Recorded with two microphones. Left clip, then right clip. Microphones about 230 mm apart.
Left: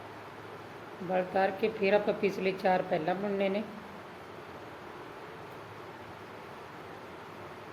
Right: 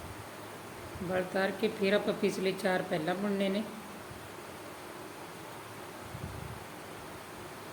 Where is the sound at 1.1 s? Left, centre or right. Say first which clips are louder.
Left 3 dB; right.